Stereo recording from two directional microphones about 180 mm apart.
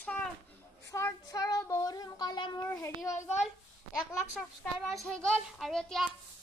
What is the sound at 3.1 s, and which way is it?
Speech, 40° left (ahead or behind).